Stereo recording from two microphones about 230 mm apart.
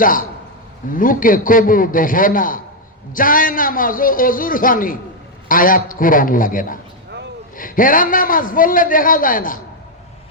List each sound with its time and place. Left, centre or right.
0.0 s a man's voice: left